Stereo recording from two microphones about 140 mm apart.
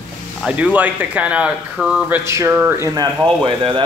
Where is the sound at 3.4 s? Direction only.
35° right (ahead or behind).